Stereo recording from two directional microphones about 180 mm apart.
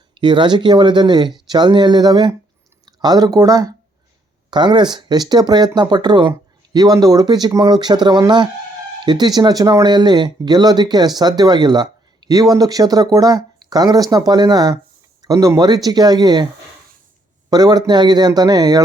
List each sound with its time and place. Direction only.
0.1 s speech: 25° right (ahead or behind)
17.5 s speech: 20° right (ahead or behind)